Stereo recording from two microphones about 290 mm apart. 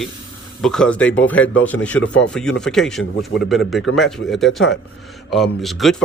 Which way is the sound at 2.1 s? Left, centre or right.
Left.